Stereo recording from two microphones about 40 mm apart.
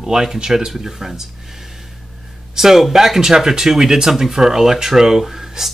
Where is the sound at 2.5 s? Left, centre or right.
Centre.